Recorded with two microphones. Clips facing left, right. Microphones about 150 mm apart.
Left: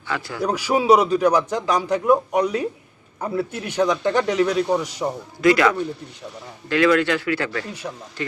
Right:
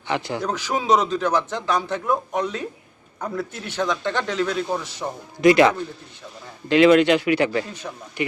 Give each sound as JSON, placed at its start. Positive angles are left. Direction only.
{"t": 0.1, "sound": "speech", "side_deg": -20}
{"t": 0.4, "sound": "a man's voice", "side_deg": 10}
{"t": 5.4, "sound": "speech", "side_deg": -25}